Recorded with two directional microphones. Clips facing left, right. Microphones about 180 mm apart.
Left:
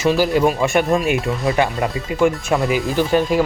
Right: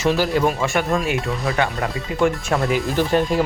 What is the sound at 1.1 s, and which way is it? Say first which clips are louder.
Speech: left 3 dB; centre (ahead or behind).